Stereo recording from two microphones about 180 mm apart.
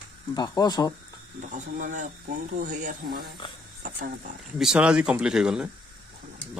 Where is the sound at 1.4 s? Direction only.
45° right (ahead or behind).